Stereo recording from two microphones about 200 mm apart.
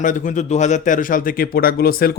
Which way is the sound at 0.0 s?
40° left (ahead or behind).